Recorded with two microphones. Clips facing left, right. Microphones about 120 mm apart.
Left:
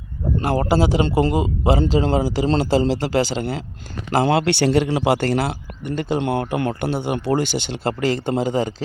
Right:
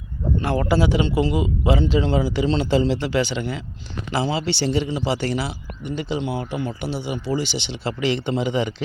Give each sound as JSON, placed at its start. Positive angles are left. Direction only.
{"t": 0.3, "sound": "speech", "side_deg": 35}
{"t": 4.1, "sound": "a man's voice", "side_deg": 60}